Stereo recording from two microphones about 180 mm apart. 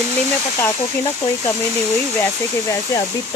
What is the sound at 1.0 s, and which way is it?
Speech, 30° left (ahead or behind).